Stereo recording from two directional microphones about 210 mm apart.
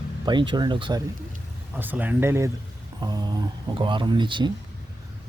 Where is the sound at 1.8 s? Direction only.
10° right (ahead or behind).